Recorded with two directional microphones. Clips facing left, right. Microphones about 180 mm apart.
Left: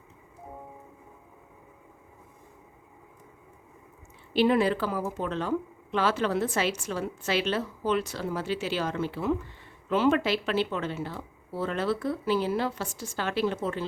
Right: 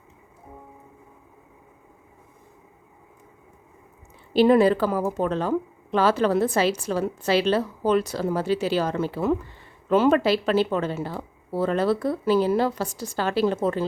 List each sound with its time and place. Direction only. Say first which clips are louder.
4.4 s speech: right 6 dB; 40° right (ahead or behind)